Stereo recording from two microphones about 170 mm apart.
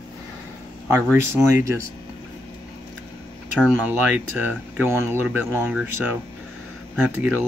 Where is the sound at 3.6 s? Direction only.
10° right (ahead or behind).